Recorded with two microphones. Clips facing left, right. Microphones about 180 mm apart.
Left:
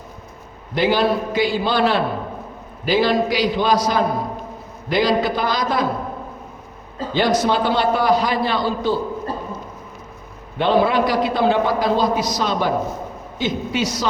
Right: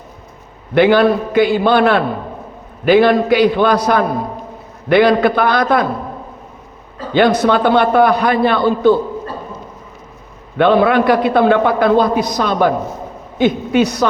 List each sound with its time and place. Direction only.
0.7 s a man's voice: 60° right (ahead or behind)
7.1 s a man's voice: 60° right (ahead or behind)
10.6 s a man's voice: 60° right (ahead or behind)